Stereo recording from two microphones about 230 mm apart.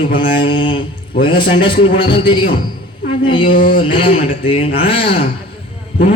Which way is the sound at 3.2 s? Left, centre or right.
Left.